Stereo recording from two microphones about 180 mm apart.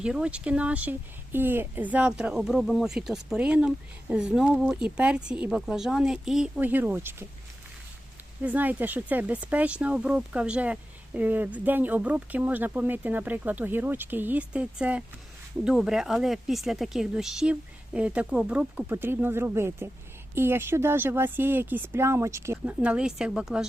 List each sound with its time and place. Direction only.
0.0 s speech: 5° right (ahead or behind)
8.4 s speech: 10° right (ahead or behind)